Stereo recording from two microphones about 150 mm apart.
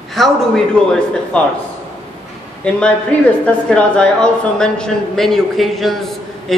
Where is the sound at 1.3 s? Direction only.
10° left (ahead or behind).